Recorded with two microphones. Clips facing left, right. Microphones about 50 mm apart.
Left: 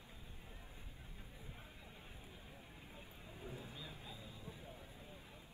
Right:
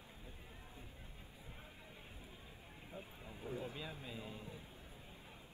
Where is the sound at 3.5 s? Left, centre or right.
Right.